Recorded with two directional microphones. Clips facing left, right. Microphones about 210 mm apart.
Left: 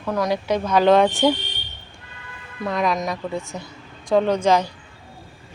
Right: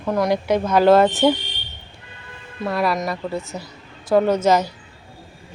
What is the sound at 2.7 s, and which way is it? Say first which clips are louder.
A woman's voice: right 1 dB; 5° right (ahead or behind).